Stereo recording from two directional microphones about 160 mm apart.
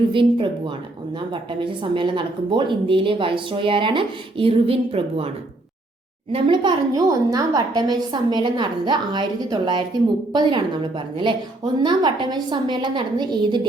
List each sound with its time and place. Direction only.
0.1 s a woman's voice: 30° right (ahead or behind)
6.3 s a woman's voice: 30° right (ahead or behind)